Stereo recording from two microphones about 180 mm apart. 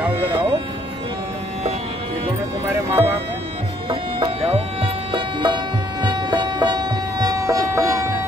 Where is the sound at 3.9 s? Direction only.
30° right (ahead or behind).